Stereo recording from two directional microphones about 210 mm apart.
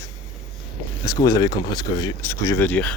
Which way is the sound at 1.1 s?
15° left (ahead or behind).